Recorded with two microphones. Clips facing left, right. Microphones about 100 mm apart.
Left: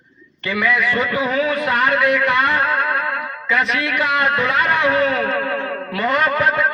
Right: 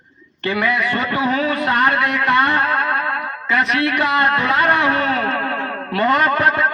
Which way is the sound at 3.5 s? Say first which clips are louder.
Right 2 dB; 55° right (ahead or behind).